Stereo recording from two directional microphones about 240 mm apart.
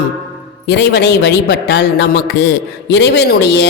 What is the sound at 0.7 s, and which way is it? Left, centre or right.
A woman's voice, left.